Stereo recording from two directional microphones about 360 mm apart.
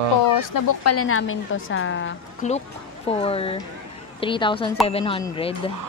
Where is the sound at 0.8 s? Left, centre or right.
Left.